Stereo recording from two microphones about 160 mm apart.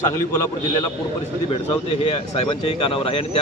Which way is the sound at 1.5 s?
35° left (ahead or behind).